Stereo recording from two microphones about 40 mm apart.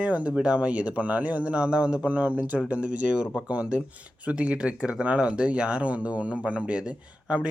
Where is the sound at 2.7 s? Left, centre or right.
Right.